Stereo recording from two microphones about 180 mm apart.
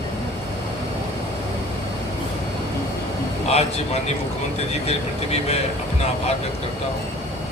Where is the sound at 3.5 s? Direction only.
35° left (ahead or behind).